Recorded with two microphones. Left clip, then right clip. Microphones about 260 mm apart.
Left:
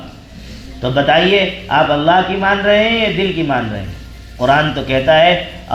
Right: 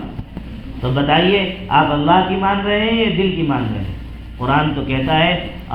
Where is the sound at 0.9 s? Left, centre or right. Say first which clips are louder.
Left 3 dB; left.